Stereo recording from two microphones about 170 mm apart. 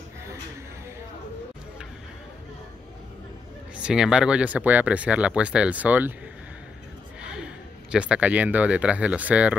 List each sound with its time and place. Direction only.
3.7 s speech: 5° right (ahead or behind)
7.2 s speech: 5° right (ahead or behind)